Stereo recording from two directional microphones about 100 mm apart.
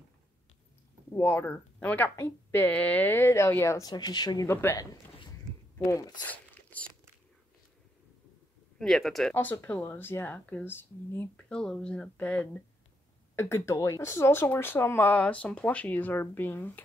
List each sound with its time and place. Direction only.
1.1 s speech: 20° left (ahead or behind)
3.8 s speech: 45° left (ahead or behind)
4.5 s speech: 25° left (ahead or behind)
5.9 s speech: 35° left (ahead or behind)
6.2 s crumpling: 15° left (ahead or behind)
8.7 s speech: 5° left (ahead or behind)
9.3 s speech: 20° left (ahead or behind)
11.4 s speech: 10° left (ahead or behind)
13.4 s speech: 25° left (ahead or behind)